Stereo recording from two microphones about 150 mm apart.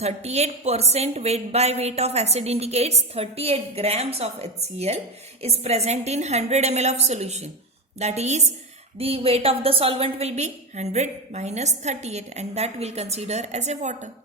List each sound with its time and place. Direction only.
0.0 s a woman's voice: 45° right (ahead or behind)